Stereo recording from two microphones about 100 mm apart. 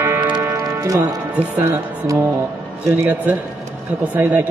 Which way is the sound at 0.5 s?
35° right (ahead or behind).